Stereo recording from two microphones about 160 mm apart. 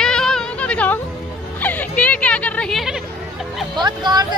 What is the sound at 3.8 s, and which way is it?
Speech, 25° right (ahead or behind).